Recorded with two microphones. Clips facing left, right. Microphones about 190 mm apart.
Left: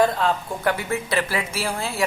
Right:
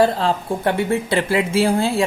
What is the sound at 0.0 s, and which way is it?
Speech, 30° right (ahead or behind).